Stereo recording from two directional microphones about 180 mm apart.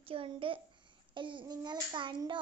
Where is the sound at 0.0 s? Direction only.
30° right (ahead or behind).